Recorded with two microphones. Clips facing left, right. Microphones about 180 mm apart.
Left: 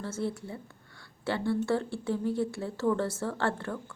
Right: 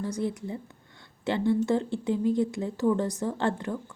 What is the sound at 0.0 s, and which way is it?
A woman's voice, 15° right (ahead or behind).